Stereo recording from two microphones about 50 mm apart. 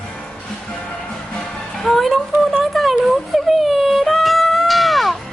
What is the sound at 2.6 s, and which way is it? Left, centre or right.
Speech, centre.